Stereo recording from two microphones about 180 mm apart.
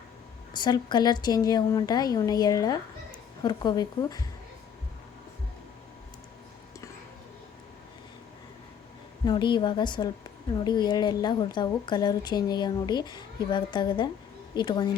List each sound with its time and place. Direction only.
0.5 s a woman's voice: 25° left (ahead or behind)
9.2 s a woman's voice: 25° left (ahead or behind)